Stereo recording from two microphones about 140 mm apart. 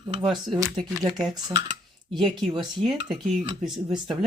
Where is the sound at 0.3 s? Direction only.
Centre (ahead or behind).